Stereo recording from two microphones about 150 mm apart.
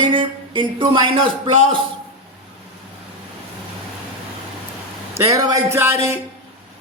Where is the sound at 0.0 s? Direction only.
35° right (ahead or behind).